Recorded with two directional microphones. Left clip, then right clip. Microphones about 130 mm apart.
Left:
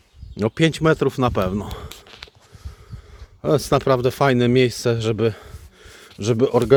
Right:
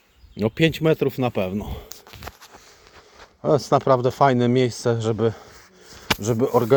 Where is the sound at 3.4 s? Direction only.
55° left (ahead or behind).